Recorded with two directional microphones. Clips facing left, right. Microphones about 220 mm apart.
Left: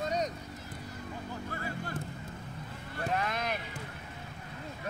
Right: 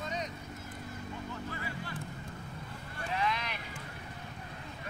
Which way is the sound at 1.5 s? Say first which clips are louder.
Left 3 dB; 45° left (ahead or behind).